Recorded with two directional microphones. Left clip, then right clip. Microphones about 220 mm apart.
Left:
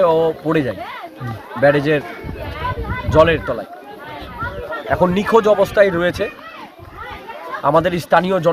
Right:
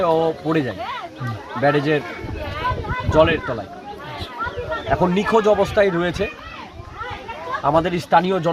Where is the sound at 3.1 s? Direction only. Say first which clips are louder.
Left 3 dB; 20° left (ahead or behind).